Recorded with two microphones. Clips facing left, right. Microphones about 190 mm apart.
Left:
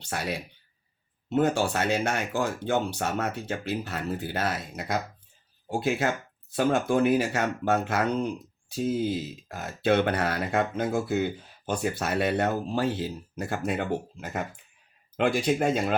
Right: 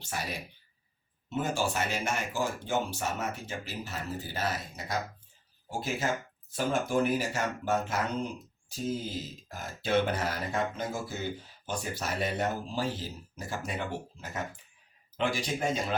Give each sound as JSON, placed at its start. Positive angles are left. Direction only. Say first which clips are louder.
{"t": 0.1, "sound": "speech", "louder": "left 5 dB", "side_deg": 70}
{"t": 9.5, "sound": "speech", "louder": "left 6 dB", "side_deg": 65}